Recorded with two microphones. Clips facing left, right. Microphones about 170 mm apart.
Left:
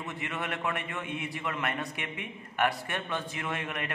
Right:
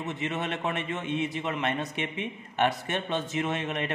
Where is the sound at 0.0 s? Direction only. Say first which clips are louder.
Right 5 dB; 20° right (ahead or behind).